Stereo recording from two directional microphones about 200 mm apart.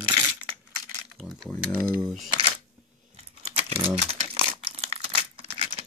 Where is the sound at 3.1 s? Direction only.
30° right (ahead or behind).